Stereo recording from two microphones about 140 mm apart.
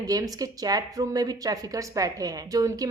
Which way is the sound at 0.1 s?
25° right (ahead or behind).